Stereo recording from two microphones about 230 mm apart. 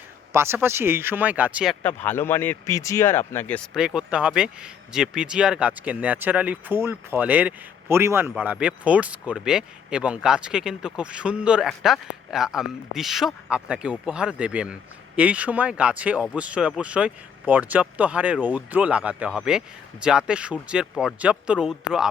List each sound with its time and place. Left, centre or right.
0.3 s speech: centre
1.8 s speech: centre